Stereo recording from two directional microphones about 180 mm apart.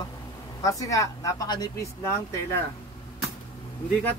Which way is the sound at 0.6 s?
20° left (ahead or behind).